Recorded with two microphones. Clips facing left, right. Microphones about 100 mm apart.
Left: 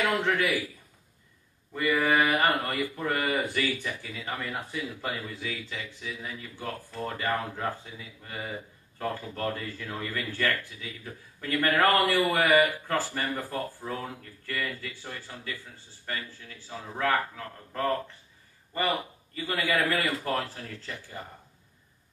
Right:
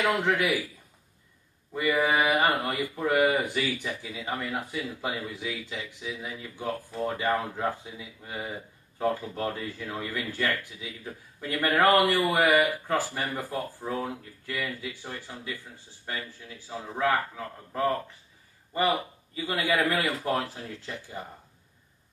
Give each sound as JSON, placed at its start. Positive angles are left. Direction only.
{"t": 0.0, "sound": "speech", "side_deg": -15}
{"t": 1.7, "sound": "speech", "side_deg": -10}
{"t": 18.7, "sound": "speech", "side_deg": -15}